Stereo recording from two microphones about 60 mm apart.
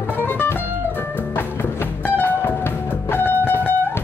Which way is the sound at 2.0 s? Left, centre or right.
Left.